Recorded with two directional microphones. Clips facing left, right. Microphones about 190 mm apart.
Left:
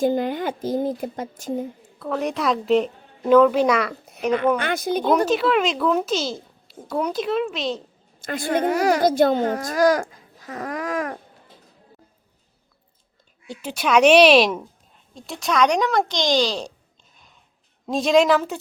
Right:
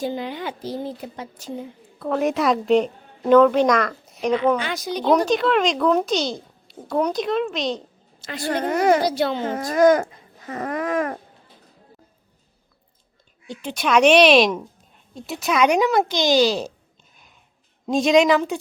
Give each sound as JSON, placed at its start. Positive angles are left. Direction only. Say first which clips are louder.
{"t": 0.0, "sound": "a woman's voice", "louder": "left 6 dB", "side_deg": 50}
{"t": 2.0, "sound": "a child's voice", "louder": "right 4 dB", "side_deg": 0}
{"t": 4.5, "sound": "speech", "louder": "left 2 dB", "side_deg": 55}
{"t": 5.2, "sound": "a child's voice", "louder": "even", "side_deg": 5}
{"t": 8.2, "sound": "a woman's voice", "louder": "left 4 dB", "side_deg": 50}
{"t": 8.4, "sound": "a child's voice", "louder": "right 1 dB", "side_deg": 5}
{"t": 9.0, "sound": "a woman's voice", "louder": "left 5 dB", "side_deg": 45}
{"t": 9.5, "sound": "a child's voice", "louder": "right 3 dB", "side_deg": 0}
{"t": 13.5, "sound": "a woman's voice", "louder": "even", "side_deg": 5}
{"t": 17.8, "sound": "a child's voice", "louder": "right 1 dB", "side_deg": 0}